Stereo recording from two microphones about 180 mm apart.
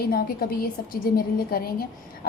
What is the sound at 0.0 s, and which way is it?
A woman's voice, 55° left (ahead or behind).